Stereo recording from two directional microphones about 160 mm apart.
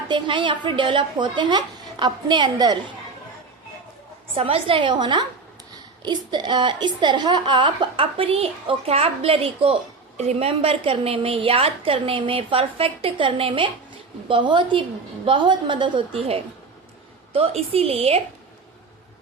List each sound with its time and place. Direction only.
0.1 s a woman's voice: 30° right (ahead or behind)
4.4 s a woman's voice: 35° right (ahead or behind)